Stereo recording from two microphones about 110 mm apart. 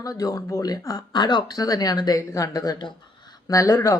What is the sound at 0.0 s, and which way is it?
A man's voice, 35° left (ahead or behind).